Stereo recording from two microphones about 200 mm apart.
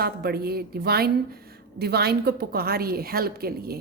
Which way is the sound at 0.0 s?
50° right (ahead or behind).